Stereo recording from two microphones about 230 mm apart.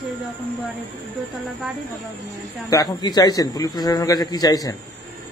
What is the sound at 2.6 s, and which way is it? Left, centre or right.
A man's voice, centre.